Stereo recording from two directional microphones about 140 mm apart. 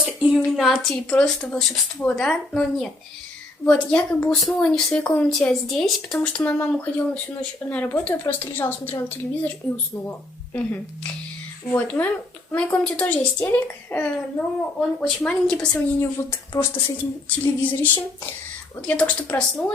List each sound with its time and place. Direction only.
0.0 s speech: 5° right (ahead or behind); by 10.8 s 15° left (ahead or behind)
12.5 s speech: 10° left (ahead or behind)
16.5 s a woman's voice: 20° left (ahead or behind)